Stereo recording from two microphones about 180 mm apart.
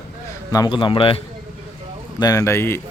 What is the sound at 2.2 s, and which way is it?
Speech, 20° left (ahead or behind).